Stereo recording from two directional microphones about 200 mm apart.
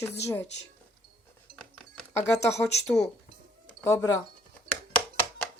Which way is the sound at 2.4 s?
15° left (ahead or behind).